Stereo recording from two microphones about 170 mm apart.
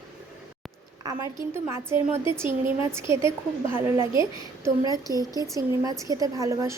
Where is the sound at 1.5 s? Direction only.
15° right (ahead or behind).